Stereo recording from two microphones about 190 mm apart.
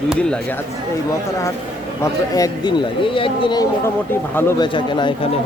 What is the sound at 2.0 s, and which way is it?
Speech, 20° left (ahead or behind).